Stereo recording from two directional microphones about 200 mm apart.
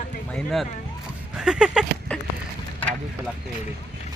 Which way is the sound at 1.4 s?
5° right (ahead or behind).